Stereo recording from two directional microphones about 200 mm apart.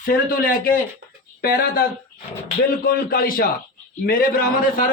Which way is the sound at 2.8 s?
50° left (ahead or behind).